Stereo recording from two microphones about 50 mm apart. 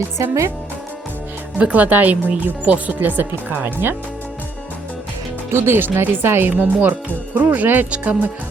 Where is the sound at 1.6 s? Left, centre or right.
Right.